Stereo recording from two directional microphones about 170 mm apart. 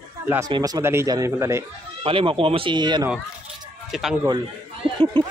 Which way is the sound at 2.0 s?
30° right (ahead or behind).